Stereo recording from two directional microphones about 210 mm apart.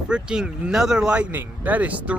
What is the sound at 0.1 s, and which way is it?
Speech, 5° right (ahead or behind).